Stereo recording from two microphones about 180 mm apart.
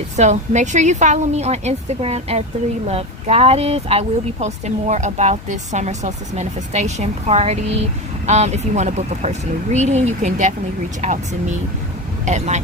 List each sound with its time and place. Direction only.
0.2 s speech: 40° right (ahead or behind)
12.2 s speech: 40° right (ahead or behind)